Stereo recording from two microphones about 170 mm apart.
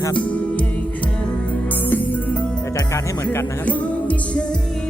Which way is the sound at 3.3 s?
10° left (ahead or behind).